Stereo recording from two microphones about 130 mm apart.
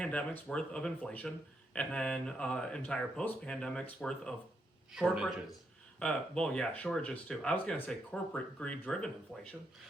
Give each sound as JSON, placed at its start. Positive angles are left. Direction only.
{"t": 0.0, "sound": "speech", "side_deg": 10}